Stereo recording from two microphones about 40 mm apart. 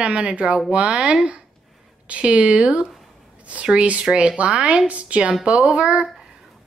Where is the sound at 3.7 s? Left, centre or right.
Right.